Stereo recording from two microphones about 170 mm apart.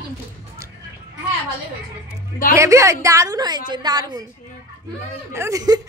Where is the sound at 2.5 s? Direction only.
15° right (ahead or behind).